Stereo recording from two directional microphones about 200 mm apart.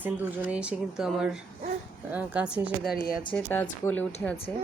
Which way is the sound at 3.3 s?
10° left (ahead or behind).